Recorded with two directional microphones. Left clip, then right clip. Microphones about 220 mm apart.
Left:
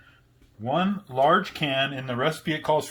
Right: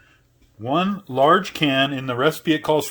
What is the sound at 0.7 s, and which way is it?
Speech, 50° right (ahead or behind).